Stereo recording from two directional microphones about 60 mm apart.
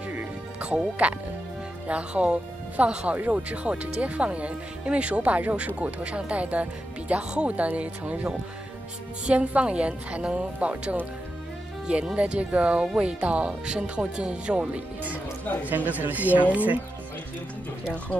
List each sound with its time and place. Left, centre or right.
0.6 s speech: right